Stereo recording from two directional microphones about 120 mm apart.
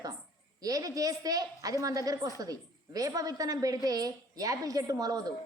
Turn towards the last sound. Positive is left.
turn(degrees=-30)  # may be behind; listen again after turning